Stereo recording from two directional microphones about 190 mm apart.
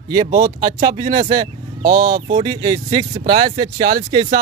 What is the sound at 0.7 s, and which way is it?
Speech, 25° right (ahead or behind).